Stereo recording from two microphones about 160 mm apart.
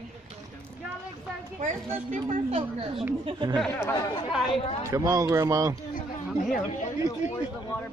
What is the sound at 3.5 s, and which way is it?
Speech, 5° right (ahead or behind).